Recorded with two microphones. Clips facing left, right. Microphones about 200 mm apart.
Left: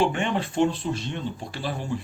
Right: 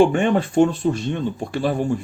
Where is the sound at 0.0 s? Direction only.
50° right (ahead or behind).